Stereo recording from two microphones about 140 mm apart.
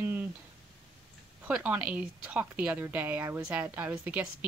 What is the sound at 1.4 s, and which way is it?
A woman's voice, 10° right (ahead or behind).